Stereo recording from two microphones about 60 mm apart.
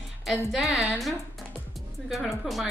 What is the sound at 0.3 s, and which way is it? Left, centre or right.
A woman's voice, centre.